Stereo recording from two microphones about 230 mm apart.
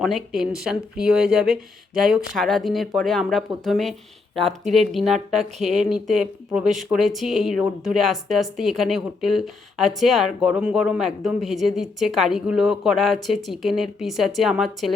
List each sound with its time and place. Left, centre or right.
0.0 s speech: centre
4.4 s speech: right
4.7 s speech: centre
5.6 s speech: right
5.9 s speech: centre